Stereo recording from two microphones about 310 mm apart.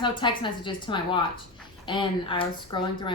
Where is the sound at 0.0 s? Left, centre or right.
Centre.